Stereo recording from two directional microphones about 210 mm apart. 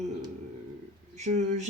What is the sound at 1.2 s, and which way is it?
Speech, 35° right (ahead or behind).